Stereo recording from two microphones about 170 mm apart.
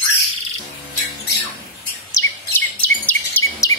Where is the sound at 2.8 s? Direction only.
10° left (ahead or behind).